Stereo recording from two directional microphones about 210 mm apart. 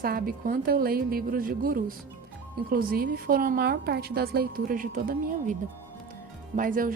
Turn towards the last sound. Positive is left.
turn(degrees=-40)  # may be behind; listen again after turning